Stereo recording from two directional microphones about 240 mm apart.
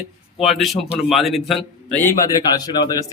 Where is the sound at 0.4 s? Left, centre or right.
Centre.